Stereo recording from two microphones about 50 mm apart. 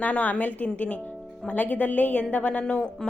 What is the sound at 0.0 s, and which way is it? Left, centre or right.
Speech, left.